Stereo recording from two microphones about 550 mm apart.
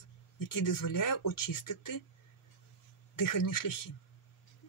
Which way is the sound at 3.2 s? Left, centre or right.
Left.